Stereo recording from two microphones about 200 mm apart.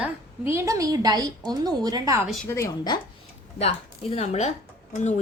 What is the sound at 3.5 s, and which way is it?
Speech, 30° left (ahead or behind).